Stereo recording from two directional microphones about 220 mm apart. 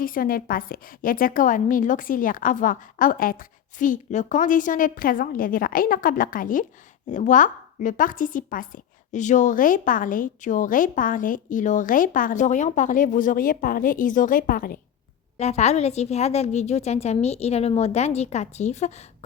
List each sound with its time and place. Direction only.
0.0 s a woman's voice: 40° left (ahead or behind)